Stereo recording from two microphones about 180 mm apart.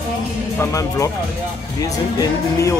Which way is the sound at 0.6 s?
15° left (ahead or behind).